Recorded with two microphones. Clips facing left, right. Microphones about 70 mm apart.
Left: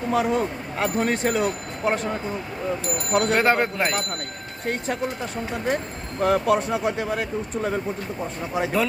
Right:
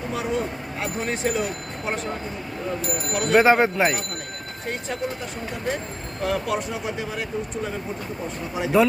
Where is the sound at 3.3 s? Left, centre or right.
Centre.